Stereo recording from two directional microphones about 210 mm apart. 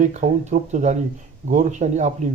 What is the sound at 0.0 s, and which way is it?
Speech, 35° right (ahead or behind).